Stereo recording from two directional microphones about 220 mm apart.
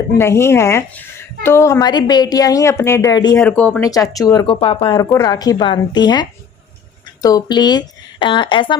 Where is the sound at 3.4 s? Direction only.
5° left (ahead or behind); by 4.9 s 25° left (ahead or behind).